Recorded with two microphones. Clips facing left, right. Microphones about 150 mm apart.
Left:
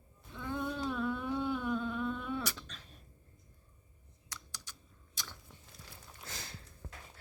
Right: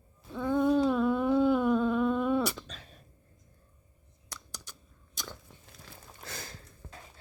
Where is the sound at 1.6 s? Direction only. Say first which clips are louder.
Right 9 dB; 90° right.